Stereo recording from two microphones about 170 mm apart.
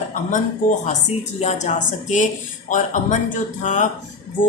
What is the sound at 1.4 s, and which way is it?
Speech, 45° left (ahead or behind).